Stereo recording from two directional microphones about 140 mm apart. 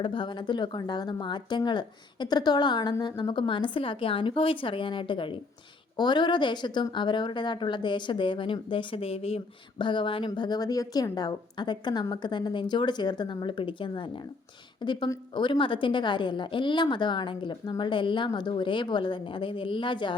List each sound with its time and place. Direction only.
0.0 s speech: 35° left (ahead or behind)